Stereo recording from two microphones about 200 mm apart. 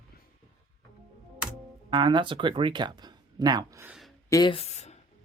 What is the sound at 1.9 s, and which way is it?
Speech, 25° right (ahead or behind).